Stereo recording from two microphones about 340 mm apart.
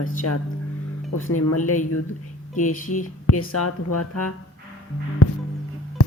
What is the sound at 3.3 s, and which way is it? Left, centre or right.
Speech, left.